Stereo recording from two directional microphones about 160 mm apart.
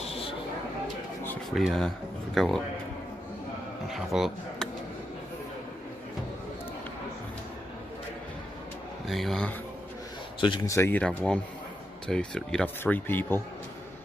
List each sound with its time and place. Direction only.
1.5 s speech: centre (ahead or behind)
3.9 s speech: centre (ahead or behind)
9.0 s speech: centre (ahead or behind)
10.4 s speech: 30° left (ahead or behind)
10.7 s speech: 15° left (ahead or behind)